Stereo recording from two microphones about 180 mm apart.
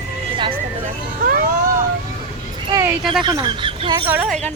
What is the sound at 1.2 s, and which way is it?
Speech, 50° right (ahead or behind).